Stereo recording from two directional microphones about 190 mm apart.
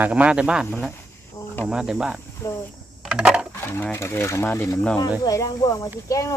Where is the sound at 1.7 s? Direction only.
5° right (ahead or behind).